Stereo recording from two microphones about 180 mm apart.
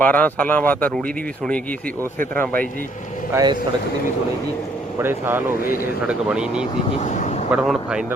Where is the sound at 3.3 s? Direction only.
20° right (ahead or behind).